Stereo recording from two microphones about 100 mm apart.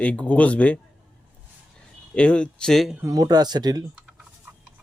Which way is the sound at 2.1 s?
10° left (ahead or behind).